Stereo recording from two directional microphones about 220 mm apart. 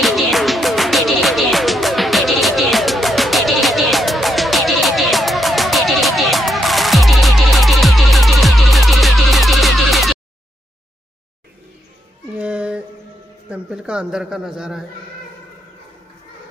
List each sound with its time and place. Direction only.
0.0 s music: centre (ahead or behind)
12.4 s female singing: 5° right (ahead or behind)
13.5 s speech: 5° right (ahead or behind)